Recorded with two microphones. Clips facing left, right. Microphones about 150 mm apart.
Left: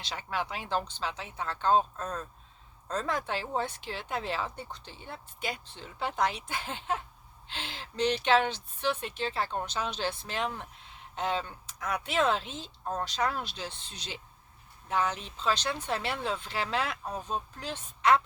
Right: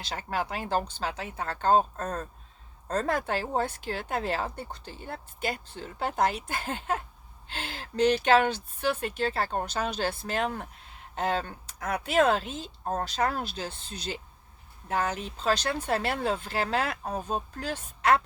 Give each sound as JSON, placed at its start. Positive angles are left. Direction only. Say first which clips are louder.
{"t": 0.1, "sound": "speech", "louder": "right 3 dB", "side_deg": -45}
{"t": 12.4, "sound": "a woman's voice", "louder": "right 4 dB", "side_deg": -5}
{"t": 12.8, "sound": "speech", "louder": "right 3 dB", "side_deg": -45}
{"t": 13.8, "sound": "a woman's voice", "louder": "right 8 dB", "side_deg": -5}
{"t": 14.8, "sound": "speech", "louder": "right 1 dB", "side_deg": -45}